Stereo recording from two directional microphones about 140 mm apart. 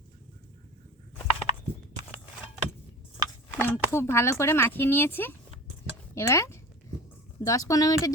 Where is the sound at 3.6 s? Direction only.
15° left (ahead or behind).